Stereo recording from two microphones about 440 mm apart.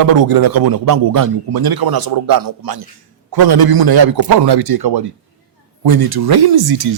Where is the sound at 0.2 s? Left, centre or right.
Right.